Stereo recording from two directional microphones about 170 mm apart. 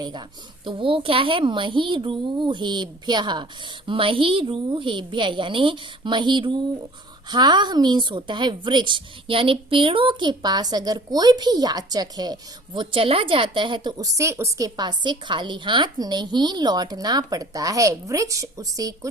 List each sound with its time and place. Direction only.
0.0 s a woman's voice: 25° right (ahead or behind)